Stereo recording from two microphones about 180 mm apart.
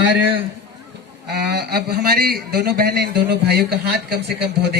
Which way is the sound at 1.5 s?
65° right (ahead or behind).